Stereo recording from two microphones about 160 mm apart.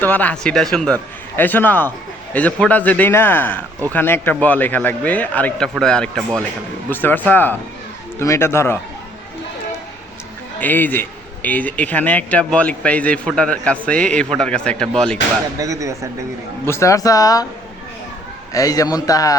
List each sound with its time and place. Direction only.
0.0 s a man's voice: 10° left (ahead or behind)
10.6 s a man's voice: 10° left (ahead or behind)
15.5 s speech: 20° right (ahead or behind)
16.6 s speech: 15° left (ahead or behind)
18.5 s speech: 20° left (ahead or behind)